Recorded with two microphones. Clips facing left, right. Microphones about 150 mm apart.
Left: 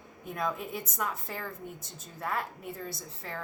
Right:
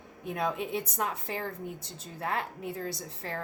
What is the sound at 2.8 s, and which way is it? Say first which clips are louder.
Speech: right 4 dB; 75° right (ahead or behind).